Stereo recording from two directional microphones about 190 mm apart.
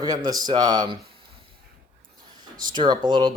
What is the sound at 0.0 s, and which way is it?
Speech, 20° right (ahead or behind).